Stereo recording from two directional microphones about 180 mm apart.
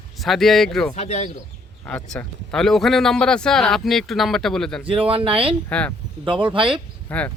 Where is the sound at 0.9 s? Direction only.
40° left (ahead or behind).